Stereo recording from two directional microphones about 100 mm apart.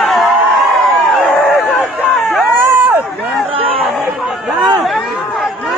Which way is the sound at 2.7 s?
20° right (ahead or behind).